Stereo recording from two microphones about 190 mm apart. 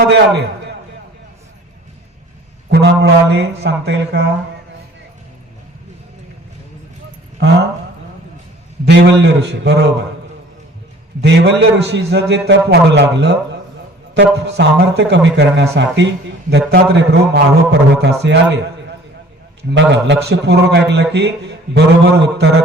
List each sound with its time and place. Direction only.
0.1 s a man's voice: 65° right (ahead or behind)
2.6 s a man's voice: 65° right (ahead or behind)
8.8 s a man's voice: 65° right (ahead or behind)
11.2 s a man's voice: 60° right (ahead or behind)
19.7 s a man's voice: 70° right (ahead or behind)